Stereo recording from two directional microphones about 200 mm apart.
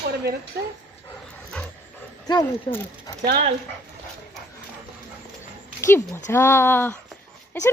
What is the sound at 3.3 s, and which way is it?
Speech, 45° right (ahead or behind).